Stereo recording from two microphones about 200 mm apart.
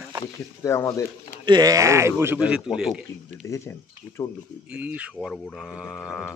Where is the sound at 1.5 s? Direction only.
20° right (ahead or behind); by 2.9 s 5° right (ahead or behind).